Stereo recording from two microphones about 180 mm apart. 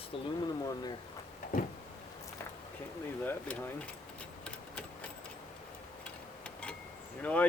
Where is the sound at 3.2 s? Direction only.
10° left (ahead or behind).